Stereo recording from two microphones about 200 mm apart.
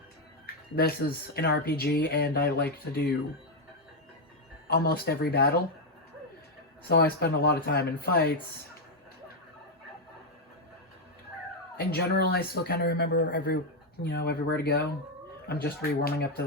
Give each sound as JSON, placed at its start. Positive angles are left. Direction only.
{"t": 0.4, "sound": "speech", "side_deg": 50}
{"t": 4.7, "sound": "speech", "side_deg": 50}
{"t": 6.8, "sound": "speech", "side_deg": 50}
{"t": 11.9, "sound": "speech", "side_deg": 50}